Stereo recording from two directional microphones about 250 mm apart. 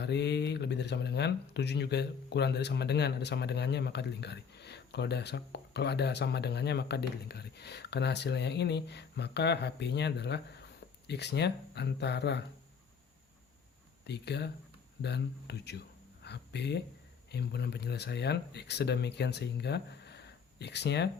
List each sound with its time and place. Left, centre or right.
0.0 s speech: left
14.1 s speech: left
16.2 s a sound: left
17.3 s speech: left